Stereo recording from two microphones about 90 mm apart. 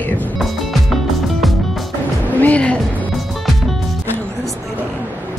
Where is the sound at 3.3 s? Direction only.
Centre (ahead or behind).